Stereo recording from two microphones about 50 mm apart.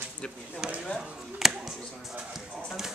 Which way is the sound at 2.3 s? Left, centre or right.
Centre.